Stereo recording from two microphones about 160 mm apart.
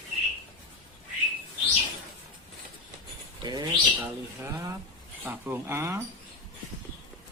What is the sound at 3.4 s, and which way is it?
Speech, 25° right (ahead or behind).